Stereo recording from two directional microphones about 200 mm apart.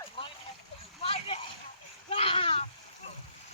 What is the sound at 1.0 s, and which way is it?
Speech, 30° left (ahead or behind).